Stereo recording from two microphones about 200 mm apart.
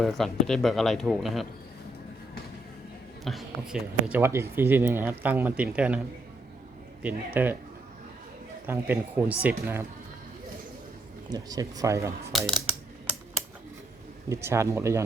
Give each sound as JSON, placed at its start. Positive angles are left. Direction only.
{"t": 0.0, "sound": "speech", "side_deg": 0}
{"t": 3.2, "sound": "speech", "side_deg": 0}
{"t": 4.2, "sound": "speech", "side_deg": -15}
{"t": 7.3, "sound": "speech", "side_deg": -10}
{"t": 8.6, "sound": "speech", "side_deg": -10}
{"t": 11.3, "sound": "speech", "side_deg": -20}
{"t": 12.3, "sound": "speech", "side_deg": 0}
{"t": 14.3, "sound": "speech", "side_deg": -15}